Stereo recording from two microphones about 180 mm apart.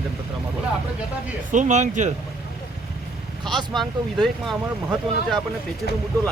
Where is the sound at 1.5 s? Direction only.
45° right (ahead or behind).